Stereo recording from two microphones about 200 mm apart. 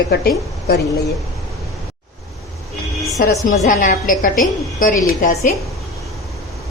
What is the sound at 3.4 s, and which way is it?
A woman's voice, 40° left (ahead or behind).